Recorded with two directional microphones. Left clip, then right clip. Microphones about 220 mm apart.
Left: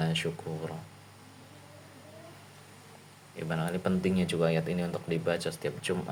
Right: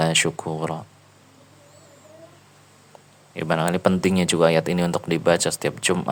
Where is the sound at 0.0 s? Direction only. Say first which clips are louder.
Right 12 dB; 50° right (ahead or behind).